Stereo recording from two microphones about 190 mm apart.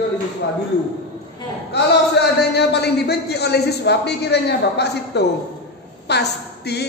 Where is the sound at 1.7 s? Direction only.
60° left (ahead or behind).